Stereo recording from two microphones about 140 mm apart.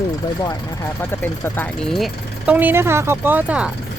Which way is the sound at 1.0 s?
15° left (ahead or behind).